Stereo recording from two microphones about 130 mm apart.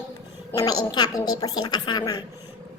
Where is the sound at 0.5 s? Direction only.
30° left (ahead or behind).